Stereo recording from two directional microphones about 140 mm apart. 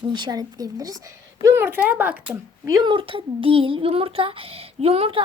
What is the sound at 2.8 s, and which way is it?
Speech, 35° right (ahead or behind).